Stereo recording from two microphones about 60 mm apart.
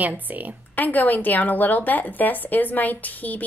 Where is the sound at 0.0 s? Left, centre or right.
Right.